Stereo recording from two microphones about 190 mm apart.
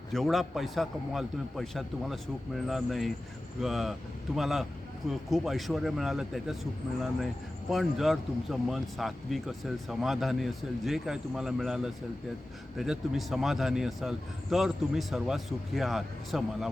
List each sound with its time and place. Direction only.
0.1 s speech: centre (ahead or behind)
7.7 s speech: centre (ahead or behind)